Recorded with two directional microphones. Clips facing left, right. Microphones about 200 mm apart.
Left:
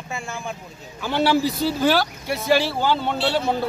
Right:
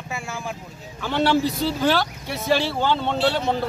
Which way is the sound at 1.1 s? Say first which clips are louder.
Even; 5° left (ahead or behind).